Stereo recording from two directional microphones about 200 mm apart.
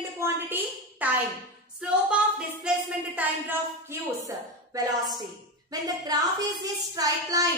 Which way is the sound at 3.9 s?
15° right (ahead or behind).